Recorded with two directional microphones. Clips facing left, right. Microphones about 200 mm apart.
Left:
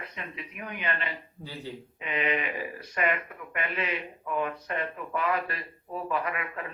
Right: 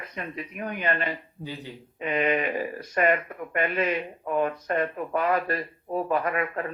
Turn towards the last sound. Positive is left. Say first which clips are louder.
# right 6 dB
turn(degrees=-45)  # may be behind; listen again after turning